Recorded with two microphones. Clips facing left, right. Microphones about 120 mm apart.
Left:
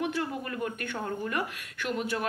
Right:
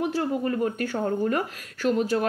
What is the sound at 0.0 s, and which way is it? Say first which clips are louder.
A woman's voice: right 6 dB; 35° right (ahead or behind).